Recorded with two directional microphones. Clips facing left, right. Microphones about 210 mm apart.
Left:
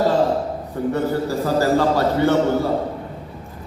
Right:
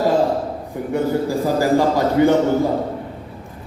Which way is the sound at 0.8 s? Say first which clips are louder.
Right 1 dB; 15° right (ahead or behind).